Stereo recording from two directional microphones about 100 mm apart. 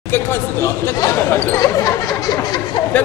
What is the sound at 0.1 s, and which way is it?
Speech, 25° left (ahead or behind).